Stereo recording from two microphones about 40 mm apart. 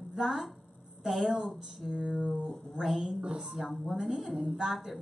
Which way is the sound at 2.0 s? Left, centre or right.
Right.